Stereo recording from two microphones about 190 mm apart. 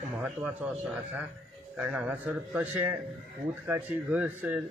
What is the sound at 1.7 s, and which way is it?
Speech, 5° right (ahead or behind).